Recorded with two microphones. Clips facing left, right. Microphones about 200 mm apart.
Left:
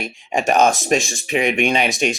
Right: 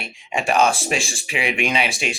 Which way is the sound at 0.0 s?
40° left (ahead or behind).